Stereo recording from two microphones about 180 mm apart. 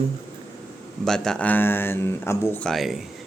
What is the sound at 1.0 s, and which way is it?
Speech, 5° left (ahead or behind).